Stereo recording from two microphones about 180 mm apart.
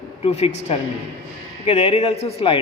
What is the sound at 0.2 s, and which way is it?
A man's voice, 35° left (ahead or behind).